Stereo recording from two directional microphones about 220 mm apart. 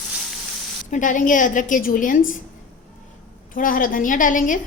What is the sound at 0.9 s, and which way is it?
A woman's voice, 35° left (ahead or behind).